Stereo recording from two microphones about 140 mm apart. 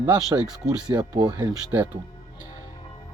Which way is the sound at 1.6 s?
10° right (ahead or behind).